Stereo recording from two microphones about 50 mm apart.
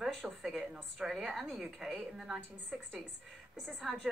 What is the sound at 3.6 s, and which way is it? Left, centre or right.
Speech, centre.